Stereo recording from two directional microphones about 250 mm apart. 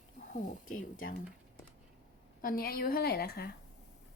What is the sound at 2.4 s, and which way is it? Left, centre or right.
A woman's voice, left.